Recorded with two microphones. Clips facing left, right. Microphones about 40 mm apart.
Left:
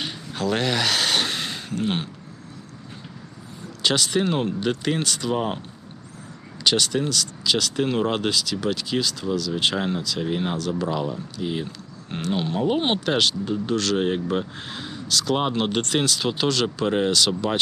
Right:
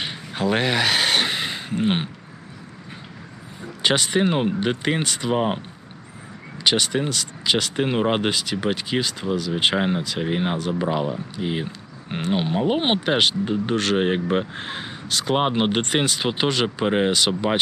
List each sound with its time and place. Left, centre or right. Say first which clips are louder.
0.0 s a sound: right 2 dB; centre
3.8 s speech: right 2 dB; right
6.7 s speech: right 1 dB; centre